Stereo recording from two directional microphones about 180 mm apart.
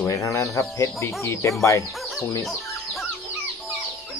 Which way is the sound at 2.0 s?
Centre (ahead or behind).